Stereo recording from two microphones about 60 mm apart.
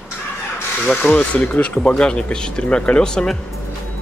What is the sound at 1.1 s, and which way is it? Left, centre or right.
Speech, left.